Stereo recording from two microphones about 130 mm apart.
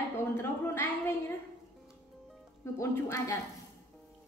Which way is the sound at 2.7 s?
25° left (ahead or behind).